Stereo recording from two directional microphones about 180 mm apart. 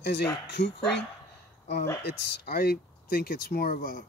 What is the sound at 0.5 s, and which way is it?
Speech, 75° left (ahead or behind).